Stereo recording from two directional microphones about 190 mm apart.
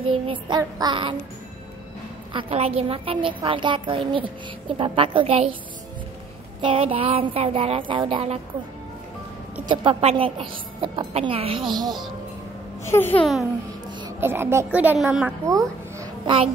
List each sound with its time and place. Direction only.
0.0 s a woman's voice: 25° right (ahead or behind)
2.3 s a woman's voice: 30° right (ahead or behind)
6.6 s a woman's voice: 30° right (ahead or behind)
9.7 s a woman's voice: 30° right (ahead or behind)
12.8 s a child's voice: 10° left (ahead or behind)
14.0 s a woman's voice: 10° right (ahead or behind)